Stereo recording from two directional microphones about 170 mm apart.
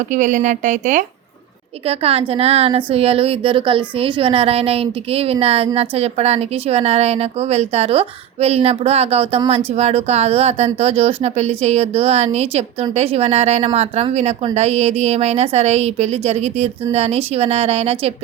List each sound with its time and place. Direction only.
0.1 s a woman's voice: 45° right (ahead or behind)
1.9 s speech: 35° right (ahead or behind)